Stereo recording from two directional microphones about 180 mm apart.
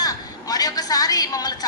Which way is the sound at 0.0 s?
20° left (ahead or behind).